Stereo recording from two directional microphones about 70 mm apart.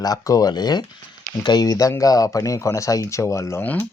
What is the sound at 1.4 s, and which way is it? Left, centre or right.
Speech, left.